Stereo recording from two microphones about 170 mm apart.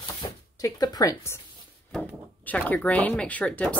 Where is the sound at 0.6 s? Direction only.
20° left (ahead or behind).